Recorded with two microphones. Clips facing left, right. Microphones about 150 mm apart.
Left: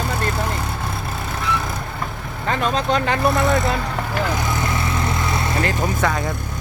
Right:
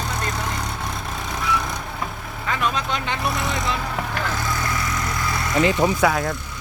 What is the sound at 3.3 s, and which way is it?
Speech, 50° left (ahead or behind).